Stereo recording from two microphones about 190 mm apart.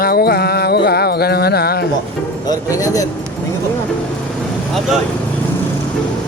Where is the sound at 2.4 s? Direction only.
20° left (ahead or behind).